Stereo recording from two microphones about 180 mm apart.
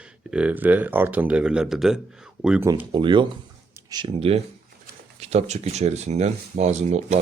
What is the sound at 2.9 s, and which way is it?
Speech, 25° right (ahead or behind).